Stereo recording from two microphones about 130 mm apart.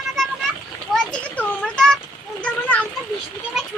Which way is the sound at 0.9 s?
5° left (ahead or behind).